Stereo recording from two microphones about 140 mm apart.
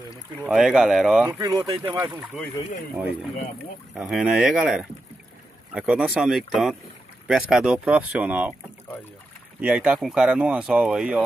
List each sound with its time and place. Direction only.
0.5 s speech: 5° right (ahead or behind)
1.4 s speech: 25° right (ahead or behind)
3.9 s speech: centre (ahead or behind)
9.6 s speech: 10° right (ahead or behind)